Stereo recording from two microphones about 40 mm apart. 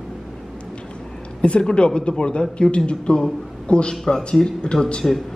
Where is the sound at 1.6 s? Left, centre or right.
Left.